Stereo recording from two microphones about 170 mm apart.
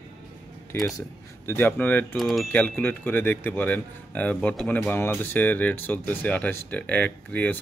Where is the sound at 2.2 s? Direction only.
Centre (ahead or behind).